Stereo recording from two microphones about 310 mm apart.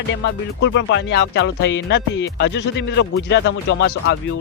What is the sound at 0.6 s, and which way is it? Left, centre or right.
Speech, left.